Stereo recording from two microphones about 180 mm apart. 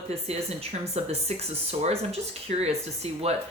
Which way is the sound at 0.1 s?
35° right (ahead or behind).